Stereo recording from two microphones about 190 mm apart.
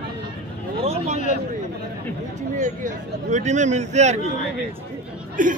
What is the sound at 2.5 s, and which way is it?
Speech, 40° right (ahead or behind).